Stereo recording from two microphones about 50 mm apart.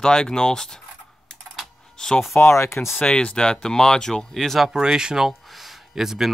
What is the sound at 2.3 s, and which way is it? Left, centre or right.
Speech, left.